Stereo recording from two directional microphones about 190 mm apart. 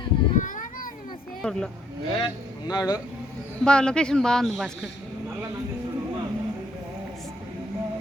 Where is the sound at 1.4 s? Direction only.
5° left (ahead or behind).